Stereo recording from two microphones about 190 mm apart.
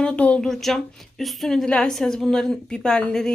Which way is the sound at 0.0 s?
5° left (ahead or behind).